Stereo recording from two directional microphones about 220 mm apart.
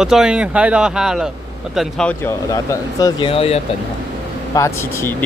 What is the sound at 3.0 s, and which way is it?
Speech, 25° left (ahead or behind).